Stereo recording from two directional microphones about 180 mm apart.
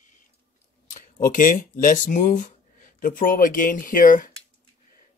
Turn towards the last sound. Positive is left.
turn(degrees=50)  # may be behind; listen again after turning